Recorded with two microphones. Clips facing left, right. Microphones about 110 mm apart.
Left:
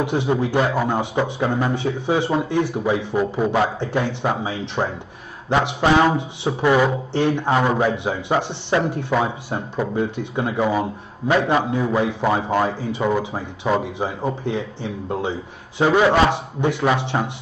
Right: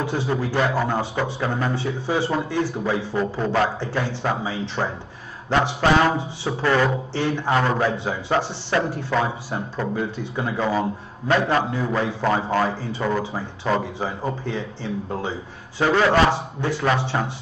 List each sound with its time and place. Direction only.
0.0 s speech: 15° left (ahead or behind)